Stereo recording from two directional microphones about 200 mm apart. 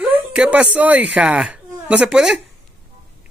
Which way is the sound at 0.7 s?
5° right (ahead or behind).